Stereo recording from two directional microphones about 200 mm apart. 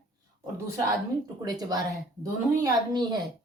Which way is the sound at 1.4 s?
20° right (ahead or behind).